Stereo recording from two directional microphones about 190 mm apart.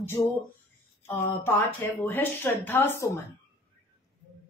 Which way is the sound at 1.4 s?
10° left (ahead or behind).